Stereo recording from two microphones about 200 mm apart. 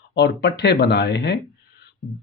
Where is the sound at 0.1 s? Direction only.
60° left (ahead or behind).